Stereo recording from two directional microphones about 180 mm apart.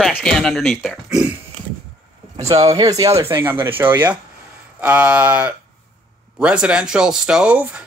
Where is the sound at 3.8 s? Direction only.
10° right (ahead or behind).